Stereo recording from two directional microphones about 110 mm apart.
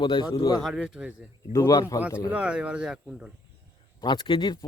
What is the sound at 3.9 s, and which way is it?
Speech, 40° left (ahead or behind).